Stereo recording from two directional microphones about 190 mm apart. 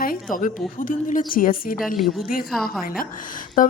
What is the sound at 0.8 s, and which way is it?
A woman's voice, 45° left (ahead or behind).